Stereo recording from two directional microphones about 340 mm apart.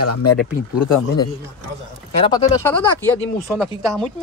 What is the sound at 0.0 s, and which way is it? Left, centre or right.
Speech, left.